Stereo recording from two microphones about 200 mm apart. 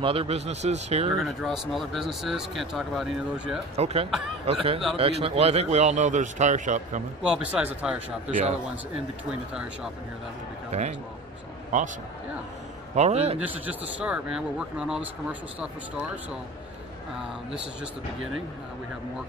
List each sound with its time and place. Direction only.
0.0 s a man's voice: 30° right (ahead or behind)
1.1 s speech: centre (ahead or behind)
3.7 s a man's voice: 30° right (ahead or behind)
7.2 s speech: 5° right (ahead or behind)
9.3 s speech: 5° right (ahead or behind)
10.7 s a man's voice: 35° right (ahead or behind)
12.9 s a man's voice: 35° right (ahead or behind)
13.4 s speech: 10° right (ahead or behind)